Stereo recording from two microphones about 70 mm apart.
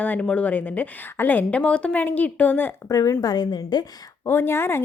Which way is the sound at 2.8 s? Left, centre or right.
Left.